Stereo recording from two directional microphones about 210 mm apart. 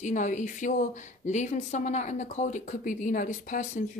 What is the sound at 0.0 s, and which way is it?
A woman's voice, 35° left (ahead or behind).